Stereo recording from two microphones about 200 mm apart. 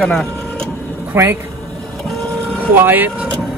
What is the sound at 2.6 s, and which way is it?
Speech, 10° right (ahead or behind).